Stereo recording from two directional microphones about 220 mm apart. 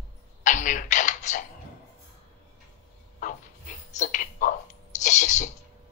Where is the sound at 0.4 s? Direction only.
35° left (ahead or behind).